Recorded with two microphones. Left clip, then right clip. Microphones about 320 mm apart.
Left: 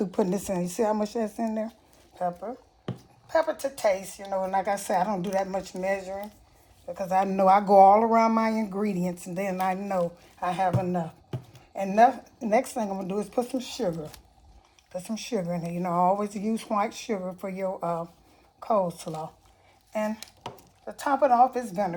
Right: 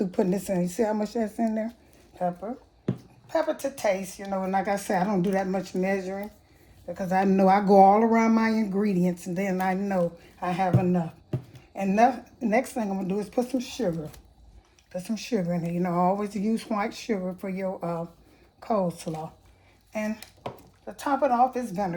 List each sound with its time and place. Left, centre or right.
0.0 s speech: centre
2.1 s a sound: left
3.3 s speech: left
20.1 s dishes: centre
21.0 s speech: left